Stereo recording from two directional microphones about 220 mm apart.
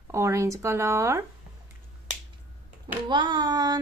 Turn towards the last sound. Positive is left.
turn(degrees=-20)  # may be behind; listen again after turning